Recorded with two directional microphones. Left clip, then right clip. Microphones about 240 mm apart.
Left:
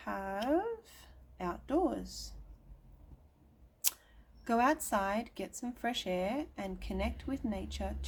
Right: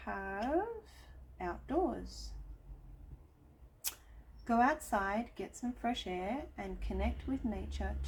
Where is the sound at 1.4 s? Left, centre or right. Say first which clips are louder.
Left 2 dB; left.